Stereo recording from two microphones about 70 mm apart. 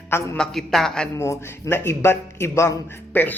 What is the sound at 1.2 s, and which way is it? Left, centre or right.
Speech, left.